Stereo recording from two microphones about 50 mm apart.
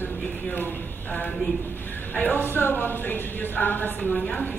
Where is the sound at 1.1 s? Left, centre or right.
Left.